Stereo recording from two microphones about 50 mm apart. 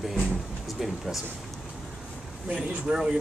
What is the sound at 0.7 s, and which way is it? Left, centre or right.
Speech, centre.